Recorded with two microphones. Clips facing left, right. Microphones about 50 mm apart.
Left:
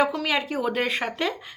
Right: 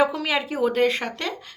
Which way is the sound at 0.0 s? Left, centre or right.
Centre.